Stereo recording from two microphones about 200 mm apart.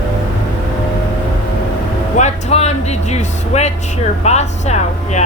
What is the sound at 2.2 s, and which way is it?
A woman's voice, 35° left (ahead or behind).